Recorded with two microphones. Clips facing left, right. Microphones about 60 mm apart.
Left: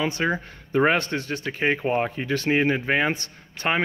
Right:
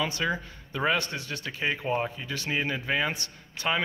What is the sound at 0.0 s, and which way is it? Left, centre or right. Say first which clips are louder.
Speech: left 4 dB; left.